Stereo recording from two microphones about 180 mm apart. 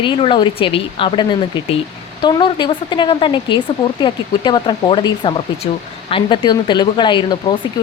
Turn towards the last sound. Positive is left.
turn(degrees=25)  # may be behind; listen again after turning